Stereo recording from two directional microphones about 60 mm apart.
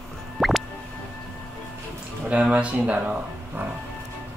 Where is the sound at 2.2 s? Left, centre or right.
Centre.